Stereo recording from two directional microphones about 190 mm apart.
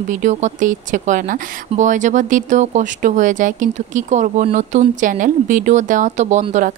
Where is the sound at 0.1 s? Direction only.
40° right (ahead or behind).